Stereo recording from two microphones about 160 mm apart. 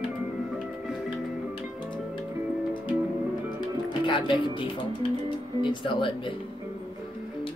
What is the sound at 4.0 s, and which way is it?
Speech, 30° left (ahead or behind).